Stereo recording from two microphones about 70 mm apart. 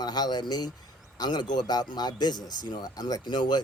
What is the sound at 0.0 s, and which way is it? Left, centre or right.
Speech, left.